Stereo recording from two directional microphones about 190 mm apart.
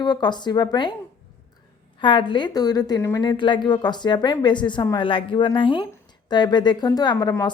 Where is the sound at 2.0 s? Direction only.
25° left (ahead or behind).